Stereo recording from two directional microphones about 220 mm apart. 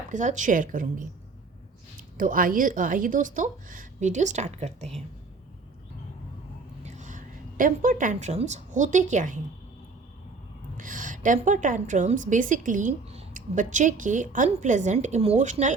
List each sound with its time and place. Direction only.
0.1 s a woman's voice: 35° right (ahead or behind)
6.8 s a woman's voice: 35° right (ahead or behind)
10.8 s a woman's voice: 35° right (ahead or behind)